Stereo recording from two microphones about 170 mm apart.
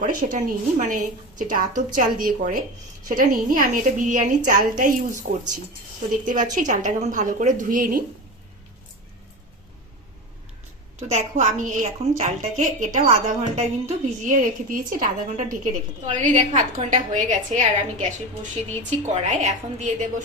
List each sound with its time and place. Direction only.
0.0 s a woman's voice: 50° right (ahead or behind)
11.1 s a woman's voice: 45° right (ahead or behind)
18.8 s a woman's voice: 45° right (ahead or behind)